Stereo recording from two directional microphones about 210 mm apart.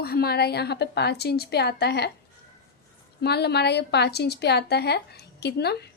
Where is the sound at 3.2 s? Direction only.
50° left (ahead or behind).